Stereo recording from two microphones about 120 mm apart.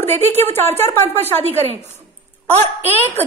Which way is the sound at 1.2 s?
60° right (ahead or behind).